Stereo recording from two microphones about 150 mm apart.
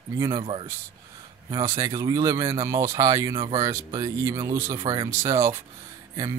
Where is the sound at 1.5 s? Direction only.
20° right (ahead or behind).